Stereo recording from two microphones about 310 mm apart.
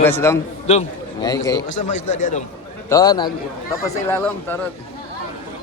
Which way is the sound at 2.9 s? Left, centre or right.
Centre.